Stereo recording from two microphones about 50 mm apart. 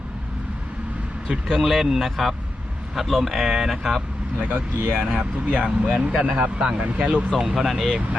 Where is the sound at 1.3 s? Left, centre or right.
Centre.